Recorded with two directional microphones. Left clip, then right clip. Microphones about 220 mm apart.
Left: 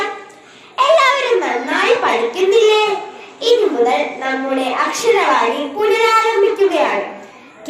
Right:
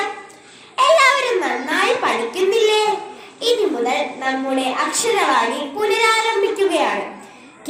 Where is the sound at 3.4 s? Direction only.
30° right (ahead or behind).